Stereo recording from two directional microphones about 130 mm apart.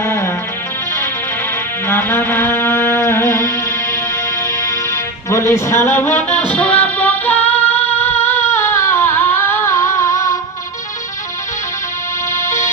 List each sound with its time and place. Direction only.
0.0 s music: 20° left (ahead or behind)
1.9 s music: 15° left (ahead or behind)
5.3 s music: 20° left (ahead or behind)
7.5 s singing: 15° left (ahead or behind)
7.9 s a sound: 15° left (ahead or behind)
12.3 s music: 20° left (ahead or behind)